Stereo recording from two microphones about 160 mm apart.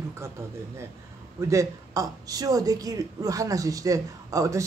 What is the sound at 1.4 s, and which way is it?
Speech, 20° right (ahead or behind).